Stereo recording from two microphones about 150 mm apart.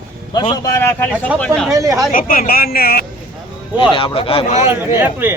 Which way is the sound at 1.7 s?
20° right (ahead or behind).